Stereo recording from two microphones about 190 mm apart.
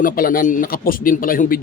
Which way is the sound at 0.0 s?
50° left (ahead or behind).